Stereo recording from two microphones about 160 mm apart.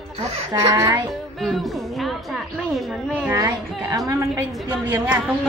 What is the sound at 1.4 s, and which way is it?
Music, centre (ahead or behind).